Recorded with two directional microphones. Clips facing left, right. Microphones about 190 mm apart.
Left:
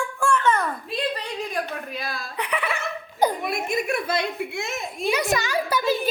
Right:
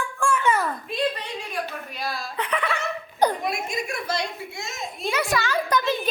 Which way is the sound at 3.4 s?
60° left (ahead or behind).